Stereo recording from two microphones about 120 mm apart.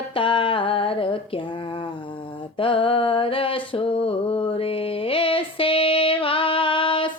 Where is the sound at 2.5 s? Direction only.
45° left (ahead or behind).